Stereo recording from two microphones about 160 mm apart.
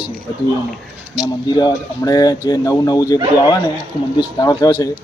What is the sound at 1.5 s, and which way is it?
Speech, 25° left (ahead or behind).